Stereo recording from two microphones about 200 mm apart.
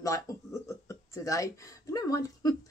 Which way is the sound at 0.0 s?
15° left (ahead or behind).